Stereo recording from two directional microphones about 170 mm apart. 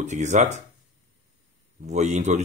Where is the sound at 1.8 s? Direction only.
40° right (ahead or behind).